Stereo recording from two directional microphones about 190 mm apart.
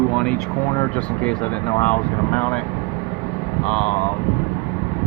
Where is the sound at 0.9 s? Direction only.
5° left (ahead or behind).